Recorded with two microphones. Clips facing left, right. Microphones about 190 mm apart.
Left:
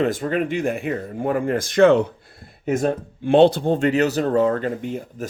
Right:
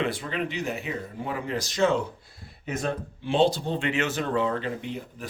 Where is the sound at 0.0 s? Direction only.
45° left (ahead or behind); by 2.0 s 65° left (ahead or behind).